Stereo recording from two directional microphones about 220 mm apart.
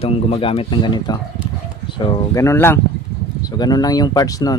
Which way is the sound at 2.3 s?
10° left (ahead or behind).